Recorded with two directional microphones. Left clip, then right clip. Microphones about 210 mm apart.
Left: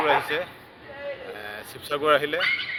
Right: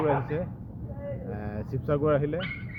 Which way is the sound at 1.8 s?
Centre (ahead or behind).